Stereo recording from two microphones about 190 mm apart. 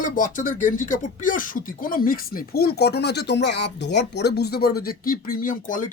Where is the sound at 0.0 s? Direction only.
45° left (ahead or behind).